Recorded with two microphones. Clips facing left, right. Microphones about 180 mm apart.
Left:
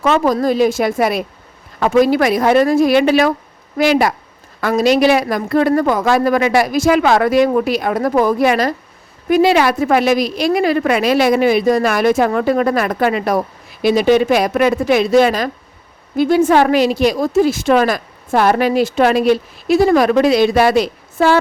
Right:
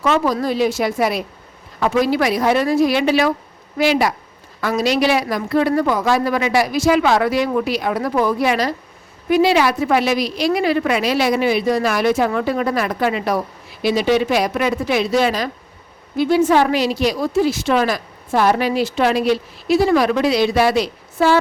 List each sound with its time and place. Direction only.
0.0 s a woman's voice: 50° left (ahead or behind)